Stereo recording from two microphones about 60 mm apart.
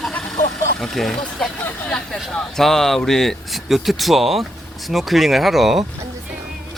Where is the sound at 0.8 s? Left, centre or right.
Centre.